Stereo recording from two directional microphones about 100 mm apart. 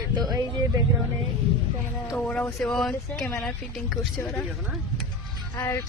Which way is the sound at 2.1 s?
15° left (ahead or behind).